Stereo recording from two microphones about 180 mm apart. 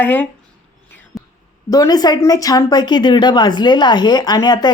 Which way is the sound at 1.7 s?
20° left (ahead or behind).